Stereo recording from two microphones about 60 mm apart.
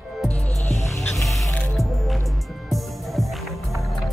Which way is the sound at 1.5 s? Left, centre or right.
Left.